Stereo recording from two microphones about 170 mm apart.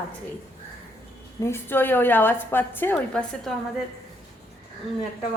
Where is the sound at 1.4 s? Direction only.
15° left (ahead or behind).